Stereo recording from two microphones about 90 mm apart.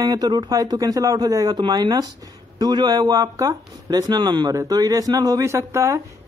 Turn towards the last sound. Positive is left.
turn(degrees=-35)  # may be behind; listen again after turning